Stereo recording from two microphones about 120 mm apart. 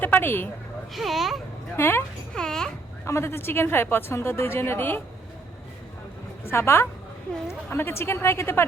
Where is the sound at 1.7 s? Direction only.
20° left (ahead or behind).